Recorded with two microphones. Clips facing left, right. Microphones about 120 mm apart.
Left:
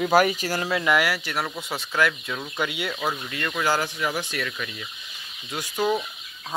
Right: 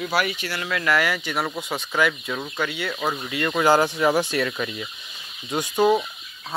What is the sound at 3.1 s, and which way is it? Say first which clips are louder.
Speech: right 4 dB; 10° right (ahead or behind).